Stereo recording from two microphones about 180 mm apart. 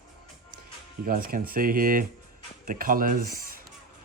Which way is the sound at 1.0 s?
55° right (ahead or behind).